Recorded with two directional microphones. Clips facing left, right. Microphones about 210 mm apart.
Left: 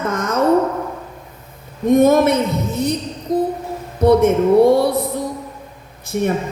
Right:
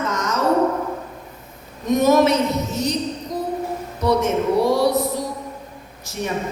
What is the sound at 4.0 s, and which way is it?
Speech, 55° left (ahead or behind).